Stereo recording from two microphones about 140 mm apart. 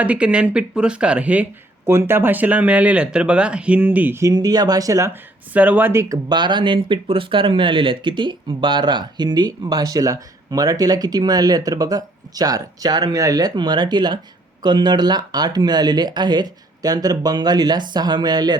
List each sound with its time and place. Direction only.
0.0 s speech: 10° right (ahead or behind)
6.2 s speech: 30° right (ahead or behind)